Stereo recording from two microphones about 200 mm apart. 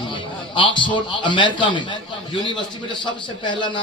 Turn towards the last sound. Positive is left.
turn(degrees=25)  # may be behind; listen again after turning